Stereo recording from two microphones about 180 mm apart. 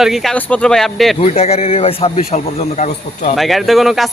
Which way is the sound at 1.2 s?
35° left (ahead or behind).